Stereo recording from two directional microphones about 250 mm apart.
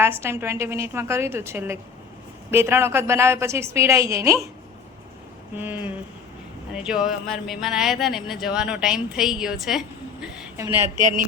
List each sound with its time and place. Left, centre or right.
0.0 s a woman's voice: centre
5.5 s a woman's voice: centre
11.0 s a sound: right